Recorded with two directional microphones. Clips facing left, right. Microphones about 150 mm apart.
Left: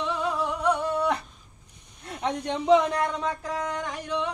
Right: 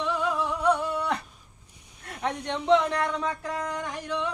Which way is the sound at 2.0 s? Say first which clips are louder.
Left 2 dB; 20° left (ahead or behind).